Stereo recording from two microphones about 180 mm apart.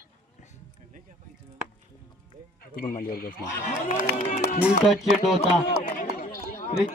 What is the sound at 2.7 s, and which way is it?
Speech, 55° left (ahead or behind).